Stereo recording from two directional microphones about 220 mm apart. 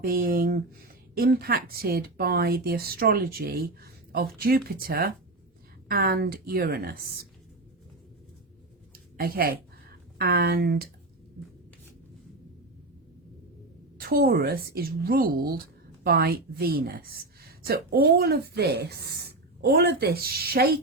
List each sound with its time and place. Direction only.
0.0 s speech: 40° right (ahead or behind)
8.9 s a sound: 45° right (ahead or behind)
10.2 s speech: 45° right (ahead or behind)
14.0 s speech: 45° right (ahead or behind)